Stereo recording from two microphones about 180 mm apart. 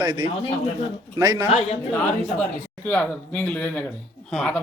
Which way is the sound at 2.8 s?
10° left (ahead or behind).